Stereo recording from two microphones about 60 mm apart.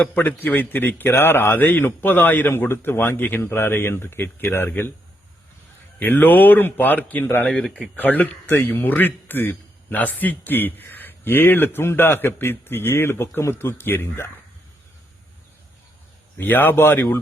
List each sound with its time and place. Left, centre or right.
0.0 s speech: left
6.0 s speech: left
7.4 s speech: centre
7.9 s speech: left
16.4 s speech: left